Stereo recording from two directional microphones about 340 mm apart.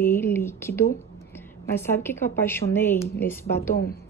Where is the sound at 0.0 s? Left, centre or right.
Centre.